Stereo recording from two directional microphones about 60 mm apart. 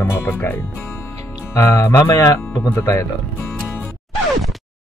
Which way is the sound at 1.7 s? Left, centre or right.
Left.